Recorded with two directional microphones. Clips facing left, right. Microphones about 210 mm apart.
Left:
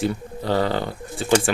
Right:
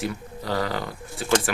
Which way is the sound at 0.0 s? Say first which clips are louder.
Left 5 dB; 30° left (ahead or behind).